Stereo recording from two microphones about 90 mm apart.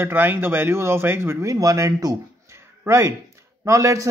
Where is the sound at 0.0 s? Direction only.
25° right (ahead or behind).